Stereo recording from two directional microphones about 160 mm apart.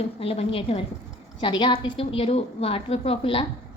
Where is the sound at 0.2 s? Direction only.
35° left (ahead or behind).